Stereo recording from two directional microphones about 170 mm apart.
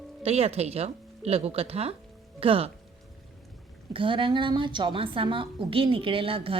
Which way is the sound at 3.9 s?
30° right (ahead or behind).